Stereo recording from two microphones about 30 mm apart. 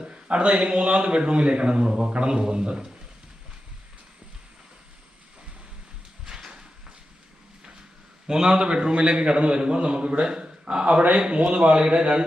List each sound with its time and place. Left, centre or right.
0.0 s a man's voice: right
6.2 s a sound: right
8.3 s a man's voice: right
11.4 s a man's voice: right